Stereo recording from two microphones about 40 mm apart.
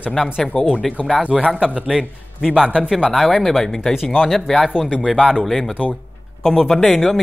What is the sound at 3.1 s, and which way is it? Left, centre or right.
Speech, centre.